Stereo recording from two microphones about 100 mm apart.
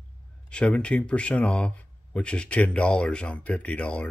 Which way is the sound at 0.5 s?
10° left (ahead or behind).